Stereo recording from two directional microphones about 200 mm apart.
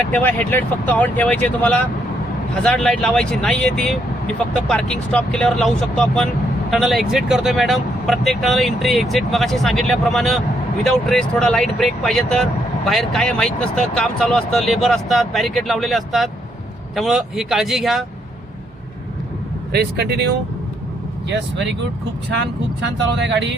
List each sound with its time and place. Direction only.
0.1 s speech: 10° left (ahead or behind)
19.7 s speech: 55° right (ahead or behind)
23.1 s speech: 60° right (ahead or behind)